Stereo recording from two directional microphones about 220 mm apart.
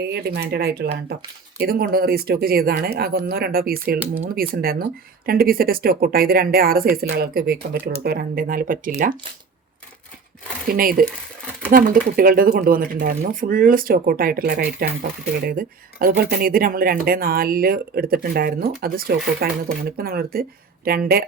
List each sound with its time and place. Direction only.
0.0 s speech: 45° right (ahead or behind)
10.8 s speech: 40° right (ahead or behind)